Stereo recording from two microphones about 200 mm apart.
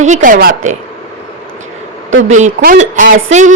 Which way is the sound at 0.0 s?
40° right (ahead or behind).